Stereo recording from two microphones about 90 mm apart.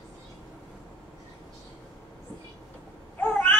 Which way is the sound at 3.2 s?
20° left (ahead or behind).